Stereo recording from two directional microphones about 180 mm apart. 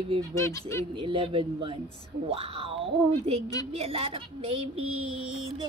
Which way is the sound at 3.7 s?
35° right (ahead or behind).